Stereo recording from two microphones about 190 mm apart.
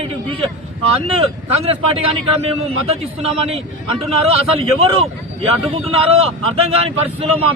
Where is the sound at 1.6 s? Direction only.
30° right (ahead or behind).